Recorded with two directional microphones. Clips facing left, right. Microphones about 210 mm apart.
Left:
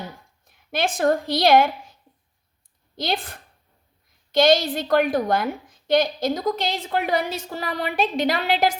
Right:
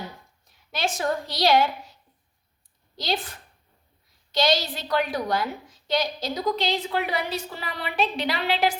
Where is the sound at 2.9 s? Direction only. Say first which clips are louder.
Left 2 dB; 55° left (ahead or behind).